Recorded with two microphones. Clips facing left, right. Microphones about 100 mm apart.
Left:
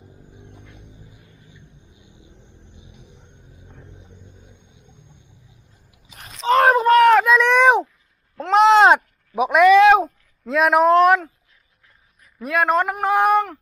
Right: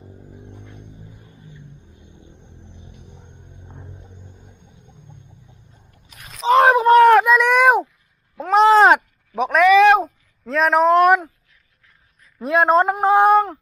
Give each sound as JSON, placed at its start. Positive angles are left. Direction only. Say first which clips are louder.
{"t": 0.8, "sound": "music", "louder": "right 4 dB", "side_deg": 5}
{"t": 2.3, "sound": "vehicle", "louder": "right 3 dB", "side_deg": -20}
{"t": 3.7, "sound": "a sound", "louder": "right 4 dB", "side_deg": -20}
{"t": 4.2, "sound": "vehicle", "louder": "right 2 dB", "side_deg": -55}
{"t": 6.3, "sound": "a sound", "louder": "right 2 dB", "side_deg": -15}
{"t": 12.4, "sound": "speech", "louder": "right 4 dB", "side_deg": -30}